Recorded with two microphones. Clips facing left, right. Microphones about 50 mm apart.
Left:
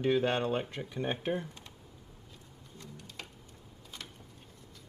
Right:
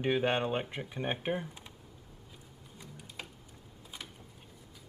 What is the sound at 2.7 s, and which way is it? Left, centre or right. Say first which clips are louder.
Tick-tock: even; centre.